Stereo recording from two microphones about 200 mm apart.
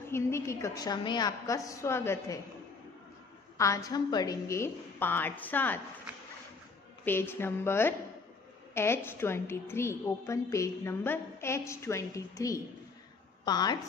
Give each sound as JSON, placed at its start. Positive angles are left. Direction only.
{"t": 0.1, "sound": "a woman's voice", "side_deg": 15}
{"t": 3.5, "sound": "a woman's voice", "side_deg": 15}
{"t": 7.1, "sound": "a woman's voice", "side_deg": 10}